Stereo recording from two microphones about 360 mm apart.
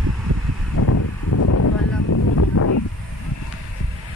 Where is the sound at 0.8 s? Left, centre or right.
Left.